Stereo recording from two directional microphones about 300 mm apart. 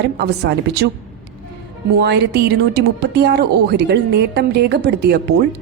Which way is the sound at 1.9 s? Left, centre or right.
Right.